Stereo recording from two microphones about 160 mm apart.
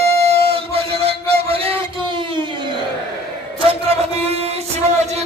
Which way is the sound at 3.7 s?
40° right (ahead or behind).